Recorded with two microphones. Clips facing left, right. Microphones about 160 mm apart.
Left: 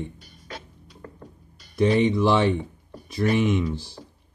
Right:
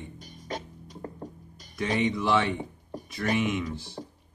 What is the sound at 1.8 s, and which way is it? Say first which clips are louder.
Speech: left 8 dB; 30° left (ahead or behind).